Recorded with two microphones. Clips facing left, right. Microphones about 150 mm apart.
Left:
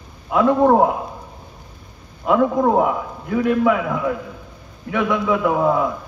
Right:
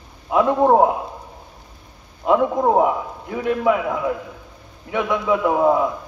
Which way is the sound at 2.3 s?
20° right (ahead or behind).